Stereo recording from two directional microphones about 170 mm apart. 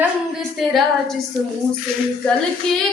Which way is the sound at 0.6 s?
Centre (ahead or behind).